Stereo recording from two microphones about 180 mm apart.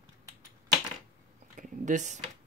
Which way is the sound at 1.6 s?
45° right (ahead or behind).